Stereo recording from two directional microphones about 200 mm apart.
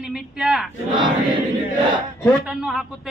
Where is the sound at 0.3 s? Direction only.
Centre (ahead or behind).